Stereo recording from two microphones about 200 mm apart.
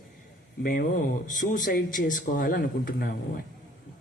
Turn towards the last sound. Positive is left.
turn(degrees=50)  # may be behind; listen again after turning